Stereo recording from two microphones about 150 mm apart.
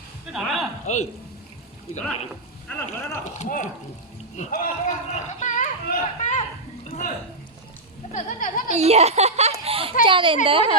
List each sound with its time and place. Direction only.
0.3 s a sound: centre (ahead or behind)
2.6 s speech: 15° left (ahead or behind)
3.3 s speech: 55° left (ahead or behind)
4.4 s run: 55° left (ahead or behind)
6.9 s a sound: 50° left (ahead or behind)
8.1 s speech: 60° left (ahead or behind)
8.7 s a child's voice: 45° right (ahead or behind)